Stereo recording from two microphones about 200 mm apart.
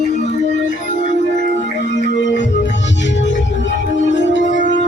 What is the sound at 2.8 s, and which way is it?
Music, 65° left (ahead or behind).